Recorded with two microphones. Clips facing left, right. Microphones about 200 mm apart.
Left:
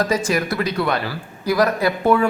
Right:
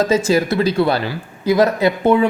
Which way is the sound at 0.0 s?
25° right (ahead or behind).